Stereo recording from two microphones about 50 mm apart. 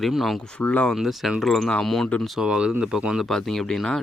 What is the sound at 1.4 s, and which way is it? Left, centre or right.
Speech, centre.